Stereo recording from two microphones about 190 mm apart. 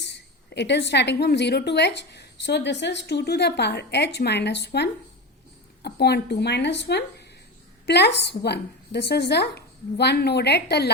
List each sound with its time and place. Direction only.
0.0 s a woman's voice: 65° left (ahead or behind)